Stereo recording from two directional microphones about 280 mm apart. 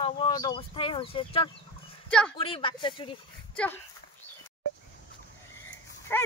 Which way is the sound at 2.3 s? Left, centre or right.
Centre.